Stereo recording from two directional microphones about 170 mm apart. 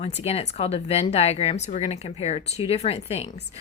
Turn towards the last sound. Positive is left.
turn(degrees=40)  # may be behind; listen again after turning